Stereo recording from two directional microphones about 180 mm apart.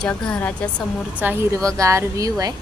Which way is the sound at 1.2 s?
15° right (ahead or behind).